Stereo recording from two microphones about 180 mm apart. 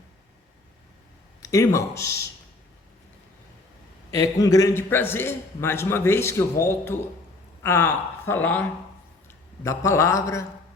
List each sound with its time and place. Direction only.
1.4 s speech: 20° left (ahead or behind)
4.1 s a man's voice: 20° left (ahead or behind)
9.6 s a man's voice: 15° left (ahead or behind)